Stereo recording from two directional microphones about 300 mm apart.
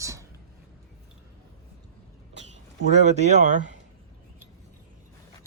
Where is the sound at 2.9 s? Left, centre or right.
Right.